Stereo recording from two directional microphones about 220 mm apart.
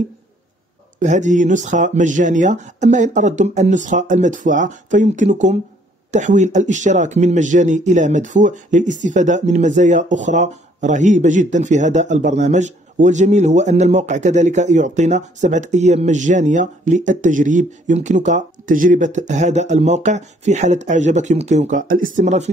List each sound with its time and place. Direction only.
0.9 s speech: 35° right (ahead or behind)